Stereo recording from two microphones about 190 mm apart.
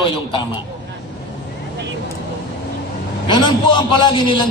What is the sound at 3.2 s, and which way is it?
A man's voice, 25° left (ahead or behind).